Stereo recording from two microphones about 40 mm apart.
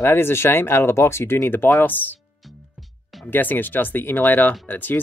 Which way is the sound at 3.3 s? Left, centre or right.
Left.